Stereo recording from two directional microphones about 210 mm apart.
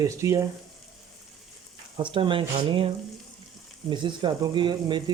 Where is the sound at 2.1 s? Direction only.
25° right (ahead or behind).